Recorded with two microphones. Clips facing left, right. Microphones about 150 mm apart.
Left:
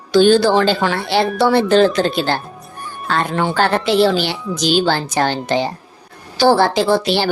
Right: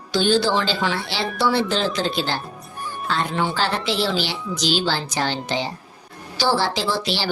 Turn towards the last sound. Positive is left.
turn(degrees=55)  # may be behind; listen again after turning